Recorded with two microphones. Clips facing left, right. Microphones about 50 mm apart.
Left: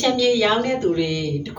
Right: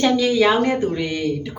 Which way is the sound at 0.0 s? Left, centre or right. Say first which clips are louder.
Right 2 dB; centre.